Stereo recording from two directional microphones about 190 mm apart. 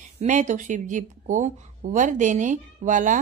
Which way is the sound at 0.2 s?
40° right (ahead or behind).